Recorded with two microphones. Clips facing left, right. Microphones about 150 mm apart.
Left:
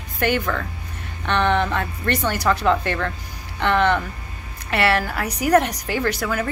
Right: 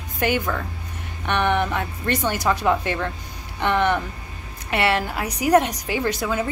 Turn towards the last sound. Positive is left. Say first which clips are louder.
# even
turn(degrees=-20)  # may be behind; listen again after turning